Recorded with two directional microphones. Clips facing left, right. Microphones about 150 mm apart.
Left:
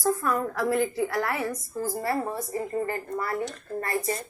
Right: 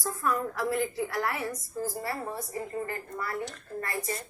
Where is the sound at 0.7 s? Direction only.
65° left (ahead or behind).